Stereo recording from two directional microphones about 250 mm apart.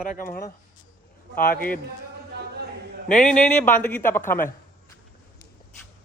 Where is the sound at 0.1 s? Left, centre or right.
Left.